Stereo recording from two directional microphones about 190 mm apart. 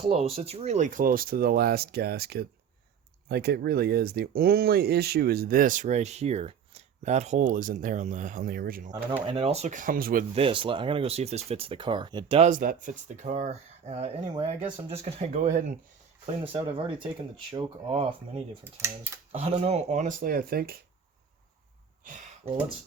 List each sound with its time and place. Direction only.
0.0 s speech: 30° right (ahead or behind); by 8.9 s 50° right (ahead or behind)
9.2 s speech: 30° right (ahead or behind); by 10.2 s 45° right (ahead or behind)
10.3 s speech: 30° right (ahead or behind)
12.4 s speech: 40° right (ahead or behind)
16.2 s speech: 30° right (ahead or behind)
18.6 s speech: 15° right (ahead or behind)
19.3 s speech: 35° right (ahead or behind); by 20.7 s 50° right (ahead or behind)